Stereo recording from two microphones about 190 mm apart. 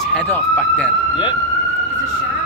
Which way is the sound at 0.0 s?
5° left (ahead or behind).